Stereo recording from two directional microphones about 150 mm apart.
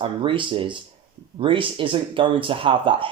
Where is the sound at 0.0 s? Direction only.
35° right (ahead or behind).